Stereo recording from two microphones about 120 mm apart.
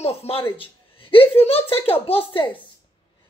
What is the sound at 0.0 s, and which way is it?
Speech, 60° left (ahead or behind).